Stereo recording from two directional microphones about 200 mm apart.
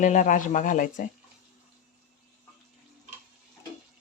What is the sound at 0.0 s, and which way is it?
Speech, 40° left (ahead or behind).